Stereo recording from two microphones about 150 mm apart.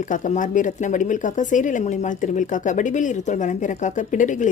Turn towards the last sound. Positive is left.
turn(degrees=55)  # may be behind; listen again after turning